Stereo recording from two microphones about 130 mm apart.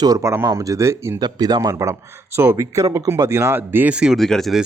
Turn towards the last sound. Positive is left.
turn(degrees=0)  # may be behind; listen again after turning